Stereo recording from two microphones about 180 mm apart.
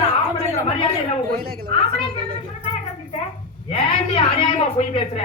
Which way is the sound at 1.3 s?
60° right (ahead or behind).